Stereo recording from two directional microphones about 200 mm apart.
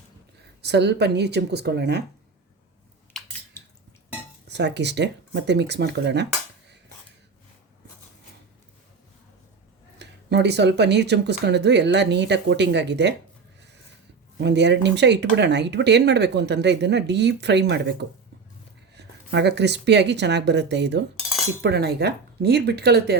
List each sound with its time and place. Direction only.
0.6 s speech: 55° right (ahead or behind)
3.1 s a sound: centre (ahead or behind)
4.4 s speech: 60° right (ahead or behind)
10.0 s speech: 55° right (ahead or behind)
14.3 s speech: 60° right (ahead or behind)